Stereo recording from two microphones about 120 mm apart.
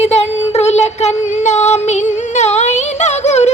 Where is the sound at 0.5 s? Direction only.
65° left (ahead or behind).